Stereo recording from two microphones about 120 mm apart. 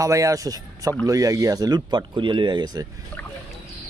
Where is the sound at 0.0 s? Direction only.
25° right (ahead or behind).